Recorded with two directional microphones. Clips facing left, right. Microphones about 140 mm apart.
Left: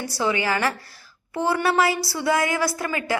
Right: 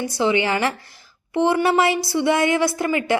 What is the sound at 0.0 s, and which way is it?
A woman's voice, 20° right (ahead or behind).